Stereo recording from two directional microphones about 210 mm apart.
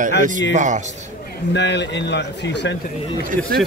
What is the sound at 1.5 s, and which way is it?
Speech, 55° left (ahead or behind).